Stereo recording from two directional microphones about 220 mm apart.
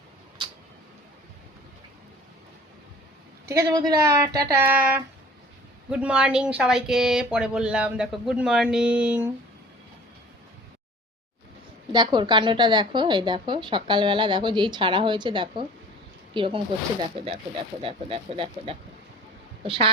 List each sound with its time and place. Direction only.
3.4 s speech: 15° right (ahead or behind)
11.9 s a woman's voice: 20° right (ahead or behind)